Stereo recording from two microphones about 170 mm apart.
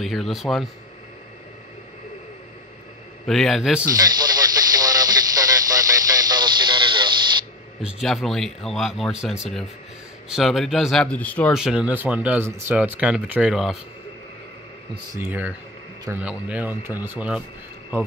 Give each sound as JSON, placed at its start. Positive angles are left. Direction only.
{"t": 0.0, "sound": "speech", "side_deg": 0}
{"t": 3.3, "sound": "speech", "side_deg": 0}
{"t": 3.8, "sound": "radio", "side_deg": -20}
{"t": 7.8, "sound": "speech", "side_deg": 0}
{"t": 11.5, "sound": "speech", "side_deg": -5}
{"t": 15.1, "sound": "speech", "side_deg": -10}